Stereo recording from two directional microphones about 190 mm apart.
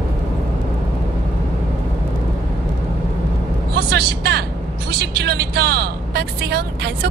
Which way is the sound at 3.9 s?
60° right (ahead or behind).